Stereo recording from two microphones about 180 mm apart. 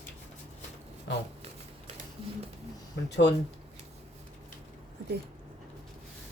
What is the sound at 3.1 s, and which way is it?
Speech, 75° left (ahead or behind).